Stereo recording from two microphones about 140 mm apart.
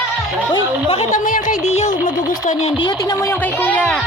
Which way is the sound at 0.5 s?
45° left (ahead or behind).